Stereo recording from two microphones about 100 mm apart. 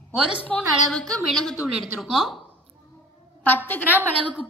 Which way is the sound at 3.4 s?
20° left (ahead or behind).